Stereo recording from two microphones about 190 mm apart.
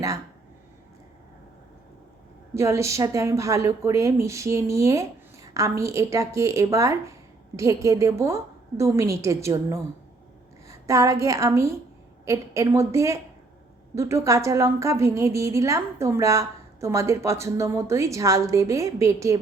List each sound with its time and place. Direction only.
2.6 s a woman's voice: 15° right (ahead or behind)